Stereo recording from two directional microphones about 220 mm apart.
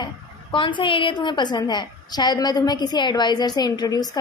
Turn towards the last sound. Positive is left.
turn(degrees=15)  # may be behind; listen again after turning